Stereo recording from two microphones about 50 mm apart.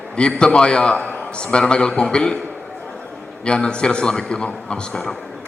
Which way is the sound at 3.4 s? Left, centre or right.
Centre.